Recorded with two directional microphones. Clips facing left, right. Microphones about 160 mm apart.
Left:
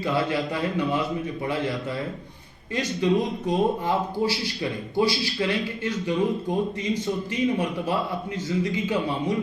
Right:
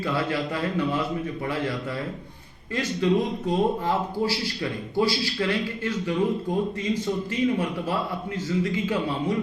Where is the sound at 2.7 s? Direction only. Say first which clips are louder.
Even; 20° left (ahead or behind).